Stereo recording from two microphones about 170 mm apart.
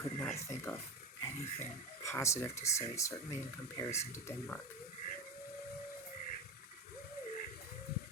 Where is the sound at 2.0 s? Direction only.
15° left (ahead or behind).